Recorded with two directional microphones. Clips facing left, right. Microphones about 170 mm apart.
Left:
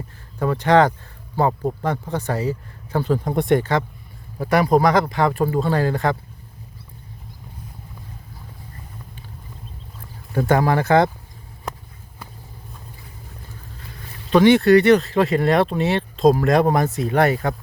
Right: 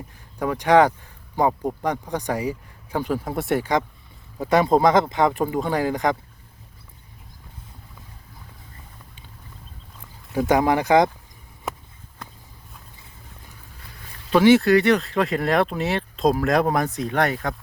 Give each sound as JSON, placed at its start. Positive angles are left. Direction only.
{"t": 0.3, "sound": "speech", "side_deg": -10}
{"t": 10.4, "sound": "speech", "side_deg": -15}
{"t": 11.7, "sound": "a sound", "side_deg": -5}
{"t": 12.2, "sound": "vehicle", "side_deg": 10}
{"t": 14.3, "sound": "speech", "side_deg": -5}